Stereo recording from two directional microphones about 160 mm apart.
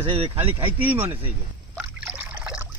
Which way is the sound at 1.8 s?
5° right (ahead or behind).